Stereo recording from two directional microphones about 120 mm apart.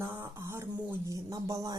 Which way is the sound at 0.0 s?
25° right (ahead or behind).